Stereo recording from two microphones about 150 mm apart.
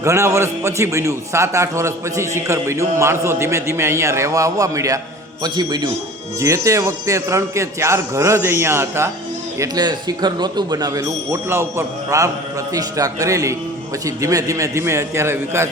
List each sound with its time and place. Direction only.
0.0 s a man's voice: 20° right (ahead or behind)